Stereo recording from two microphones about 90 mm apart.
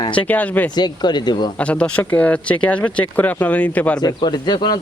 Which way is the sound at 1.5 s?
15° left (ahead or behind).